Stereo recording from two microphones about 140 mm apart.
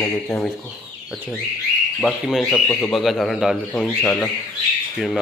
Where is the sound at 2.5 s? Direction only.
20° left (ahead or behind).